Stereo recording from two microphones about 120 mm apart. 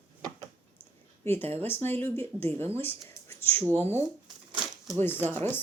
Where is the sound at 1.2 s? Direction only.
20° left (ahead or behind).